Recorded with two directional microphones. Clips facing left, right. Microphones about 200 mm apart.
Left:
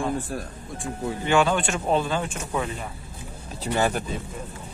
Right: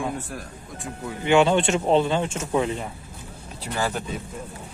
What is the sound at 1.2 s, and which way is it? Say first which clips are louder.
Speech: right 4 dB; 25° right (ahead or behind).